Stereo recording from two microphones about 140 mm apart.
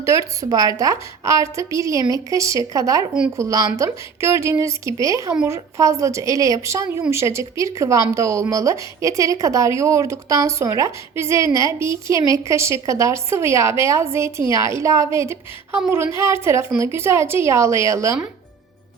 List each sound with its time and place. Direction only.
0.0 s speech: 20° right (ahead or behind)